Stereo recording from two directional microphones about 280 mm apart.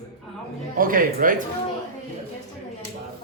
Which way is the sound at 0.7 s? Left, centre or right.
Right.